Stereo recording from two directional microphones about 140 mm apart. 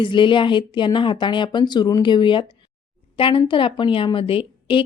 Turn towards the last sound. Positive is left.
turn(degrees=40)  # may be behind; listen again after turning